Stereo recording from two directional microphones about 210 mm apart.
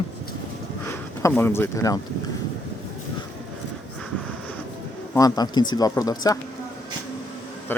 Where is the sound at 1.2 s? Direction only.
10° left (ahead or behind).